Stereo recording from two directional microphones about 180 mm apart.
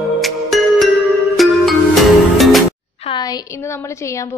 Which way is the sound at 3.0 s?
25° left (ahead or behind).